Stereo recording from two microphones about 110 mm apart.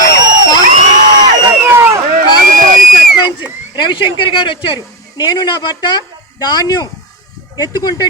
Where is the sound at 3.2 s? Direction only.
40° left (ahead or behind).